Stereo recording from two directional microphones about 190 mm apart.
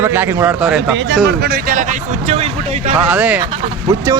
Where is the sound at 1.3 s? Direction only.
55° right (ahead or behind).